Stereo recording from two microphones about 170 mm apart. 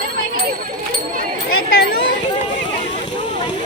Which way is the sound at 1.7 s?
65° left (ahead or behind).